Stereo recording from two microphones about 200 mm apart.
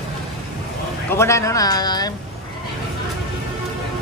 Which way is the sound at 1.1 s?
15° left (ahead or behind).